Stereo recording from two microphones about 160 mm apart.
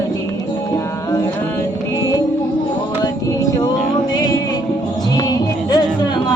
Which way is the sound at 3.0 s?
20° left (ahead or behind).